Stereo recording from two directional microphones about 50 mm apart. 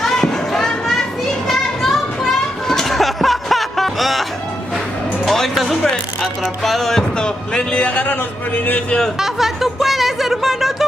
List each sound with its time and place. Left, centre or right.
0.0 s a sound: centre
1.5 s children playing: centre
5.2 s music: centre
7.9 s speech: left
9.2 s speech: centre